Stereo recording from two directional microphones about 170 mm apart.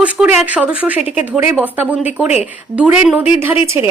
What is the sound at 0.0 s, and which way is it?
Speech, 5° right (ahead or behind).